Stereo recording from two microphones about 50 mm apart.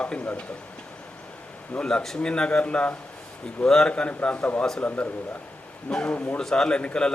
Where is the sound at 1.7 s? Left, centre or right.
Centre.